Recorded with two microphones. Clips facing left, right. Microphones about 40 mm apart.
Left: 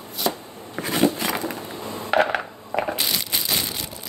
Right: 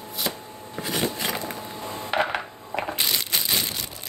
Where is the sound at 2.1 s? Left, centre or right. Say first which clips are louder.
Left 5 dB; centre.